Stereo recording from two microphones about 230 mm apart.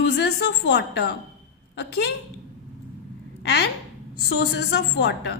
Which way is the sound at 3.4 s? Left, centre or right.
Left.